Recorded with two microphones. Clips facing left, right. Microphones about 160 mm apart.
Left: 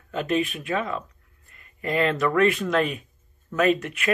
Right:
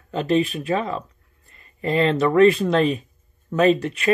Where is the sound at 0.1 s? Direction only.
30° right (ahead or behind).